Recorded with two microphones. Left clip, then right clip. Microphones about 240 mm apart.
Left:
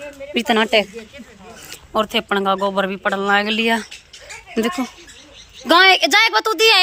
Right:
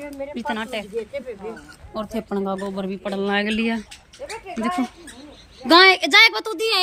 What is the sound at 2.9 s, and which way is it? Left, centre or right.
Speech, centre.